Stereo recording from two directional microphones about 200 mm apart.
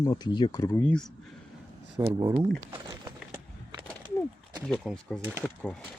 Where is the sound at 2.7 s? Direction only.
15° right (ahead or behind).